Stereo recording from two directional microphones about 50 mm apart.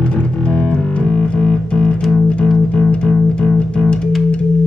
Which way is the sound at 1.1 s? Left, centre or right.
Centre.